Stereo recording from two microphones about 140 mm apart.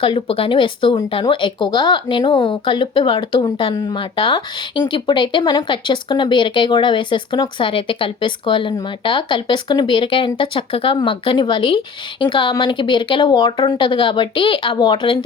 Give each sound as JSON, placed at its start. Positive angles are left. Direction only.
{"t": 0.0, "sound": "speech", "side_deg": 40}